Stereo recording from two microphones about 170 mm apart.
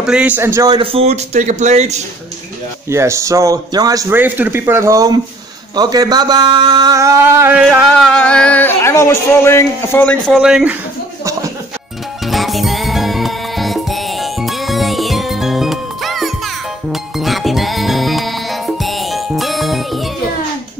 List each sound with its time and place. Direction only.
0.0 s speech: 5° right (ahead or behind)
0.7 s speech: 35° right (ahead or behind)
2.9 s a man's voice: 15° right (ahead or behind)
7.9 s speech: 5° left (ahead or behind)
12.3 s music: centre (ahead or behind)